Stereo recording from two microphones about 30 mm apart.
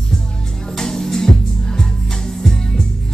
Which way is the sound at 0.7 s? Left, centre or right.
Centre.